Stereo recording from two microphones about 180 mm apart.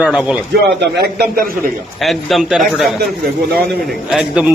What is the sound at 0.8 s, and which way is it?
Speech, 65° right (ahead or behind).